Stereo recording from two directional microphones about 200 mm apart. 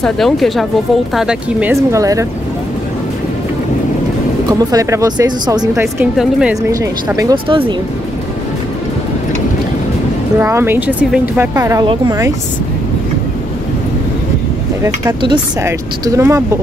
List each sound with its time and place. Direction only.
0.0 s speech: centre (ahead or behind); by 2.2 s 15° right (ahead or behind)
4.5 s speech: 15° right (ahead or behind)
10.4 s speech: 10° right (ahead or behind)
15.0 s speech: 20° right (ahead or behind)